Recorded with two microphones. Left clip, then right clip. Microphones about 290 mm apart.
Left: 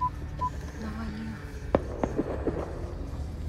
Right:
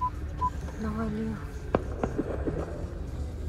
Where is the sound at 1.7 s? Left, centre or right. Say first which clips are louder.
Left 2 dB; left.